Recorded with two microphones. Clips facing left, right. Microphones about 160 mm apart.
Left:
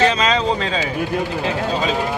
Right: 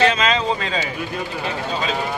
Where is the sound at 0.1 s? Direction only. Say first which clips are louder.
Left 1 dB; 35° left (ahead or behind).